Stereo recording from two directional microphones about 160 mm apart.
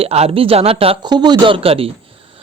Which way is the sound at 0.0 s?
40° right (ahead or behind).